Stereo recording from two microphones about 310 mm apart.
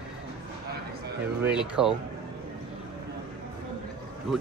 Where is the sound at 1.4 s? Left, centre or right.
Centre.